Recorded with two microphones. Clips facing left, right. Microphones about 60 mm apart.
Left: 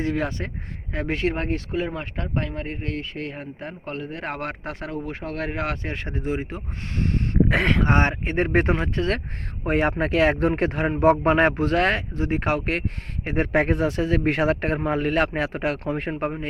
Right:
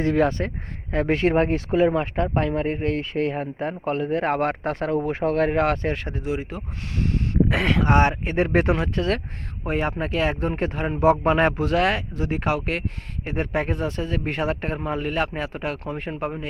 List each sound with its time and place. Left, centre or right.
0.0 s speech: centre
0.9 s speech: centre
1.3 s speech: centre
6.1 s speech: left
7.0 s a sound: left
7.7 s speech: left
9.6 s speech: left
11.4 s speech: left
13.2 s speech: left
14.8 s a man's voice: left